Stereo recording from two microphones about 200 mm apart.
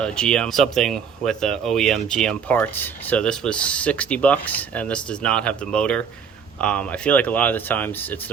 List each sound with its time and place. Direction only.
0.0 s speech: 5° left (ahead or behind)